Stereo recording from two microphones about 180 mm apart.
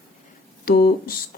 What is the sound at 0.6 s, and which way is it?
Speech, 55° left (ahead or behind).